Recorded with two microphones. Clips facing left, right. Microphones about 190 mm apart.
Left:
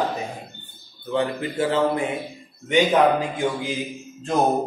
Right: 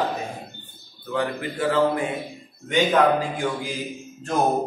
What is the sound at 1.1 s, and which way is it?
A man's voice, 25° left (ahead or behind).